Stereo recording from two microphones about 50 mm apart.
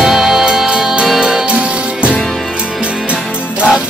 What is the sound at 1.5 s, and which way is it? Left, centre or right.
Music, right.